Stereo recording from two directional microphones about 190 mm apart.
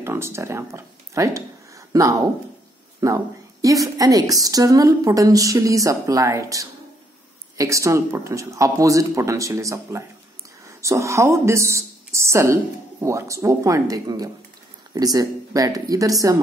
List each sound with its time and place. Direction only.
0.0 s a woman's voice: 15° right (ahead or behind)